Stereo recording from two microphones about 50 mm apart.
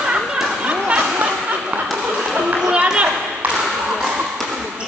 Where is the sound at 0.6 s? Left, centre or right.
Right.